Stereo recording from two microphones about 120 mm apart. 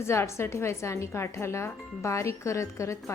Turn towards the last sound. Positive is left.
turn(degrees=25)  # may be behind; listen again after turning